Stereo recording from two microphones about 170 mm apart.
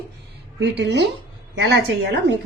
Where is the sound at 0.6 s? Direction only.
90° right.